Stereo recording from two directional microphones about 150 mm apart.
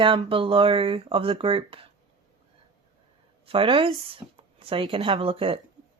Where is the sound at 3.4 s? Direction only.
40° right (ahead or behind).